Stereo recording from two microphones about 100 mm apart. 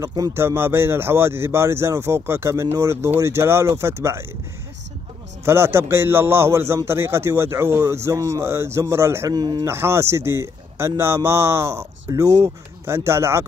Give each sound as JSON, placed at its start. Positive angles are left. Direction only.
{"t": 0.3, "sound": "speech", "side_deg": -25}
{"t": 5.4, "sound": "speech", "side_deg": -25}
{"t": 9.3, "sound": "speech", "side_deg": -45}
{"t": 9.7, "sound": "speech", "side_deg": -25}